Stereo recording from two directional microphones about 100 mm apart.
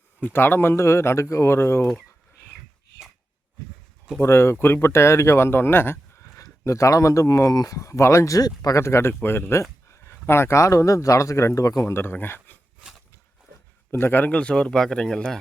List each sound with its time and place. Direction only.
0.3 s speech: 20° left (ahead or behind)
4.2 s speech: 25° left (ahead or behind)
13.9 s speech: 20° left (ahead or behind); by 15.4 s 5° left (ahead or behind)